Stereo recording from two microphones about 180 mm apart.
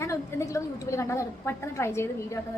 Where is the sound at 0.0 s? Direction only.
15° left (ahead or behind).